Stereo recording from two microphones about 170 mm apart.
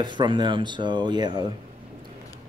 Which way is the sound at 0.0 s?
25° right (ahead or behind).